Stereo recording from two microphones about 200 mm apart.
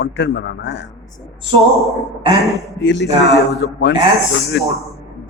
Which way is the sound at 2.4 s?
Centre (ahead or behind).